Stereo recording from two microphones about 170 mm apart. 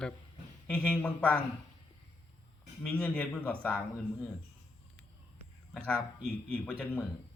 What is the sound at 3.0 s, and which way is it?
Speech, 5° left (ahead or behind).